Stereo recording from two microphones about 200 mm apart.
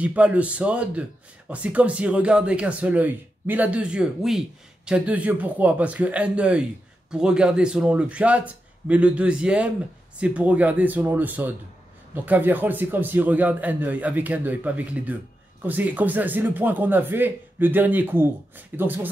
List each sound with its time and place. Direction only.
0.0 s a man's voice: 5° right (ahead or behind)